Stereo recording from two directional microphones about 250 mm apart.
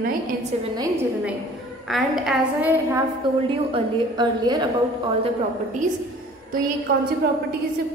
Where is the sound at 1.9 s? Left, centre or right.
Centre.